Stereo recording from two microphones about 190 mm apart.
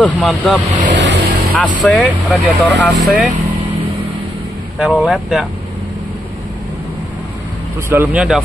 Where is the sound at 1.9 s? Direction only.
Centre (ahead or behind).